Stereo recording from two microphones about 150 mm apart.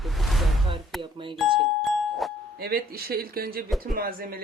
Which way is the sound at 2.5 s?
90° right.